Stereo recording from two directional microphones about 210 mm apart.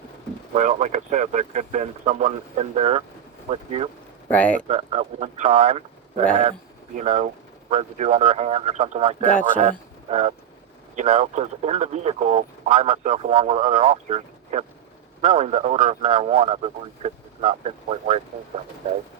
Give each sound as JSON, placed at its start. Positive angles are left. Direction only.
{"t": 0.5, "sound": "speech", "side_deg": -30}
{"t": 4.3, "sound": "speech", "side_deg": 5}
{"t": 4.7, "sound": "speech", "side_deg": -30}